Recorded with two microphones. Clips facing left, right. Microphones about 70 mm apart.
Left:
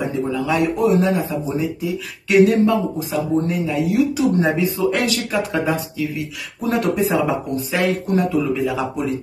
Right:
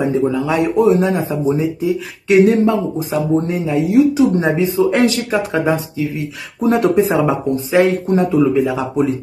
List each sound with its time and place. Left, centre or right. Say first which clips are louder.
0.5 s speech: right 3 dB; right